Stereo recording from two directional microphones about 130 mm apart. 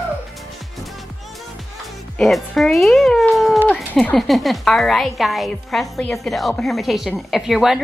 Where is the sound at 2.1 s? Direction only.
Centre (ahead or behind).